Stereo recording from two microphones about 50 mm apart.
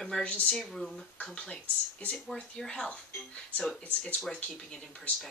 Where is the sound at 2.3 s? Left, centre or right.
Centre.